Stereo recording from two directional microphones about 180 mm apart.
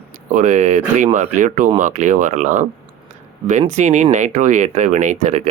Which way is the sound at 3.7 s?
40° right (ahead or behind).